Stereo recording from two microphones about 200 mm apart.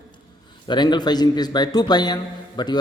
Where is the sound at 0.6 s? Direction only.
20° left (ahead or behind).